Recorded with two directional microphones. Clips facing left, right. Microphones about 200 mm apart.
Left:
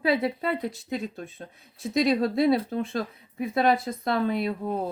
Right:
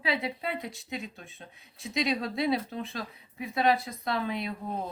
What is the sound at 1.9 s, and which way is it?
Speech, 50° left (ahead or behind).